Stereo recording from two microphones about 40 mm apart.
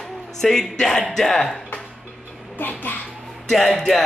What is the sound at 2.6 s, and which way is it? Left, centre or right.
Speech, left.